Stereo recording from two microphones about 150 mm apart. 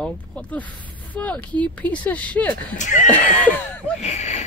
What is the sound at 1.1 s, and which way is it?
Speech, 10° left (ahead or behind).